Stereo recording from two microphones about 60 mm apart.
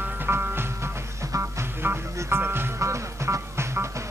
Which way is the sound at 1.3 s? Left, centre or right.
Right.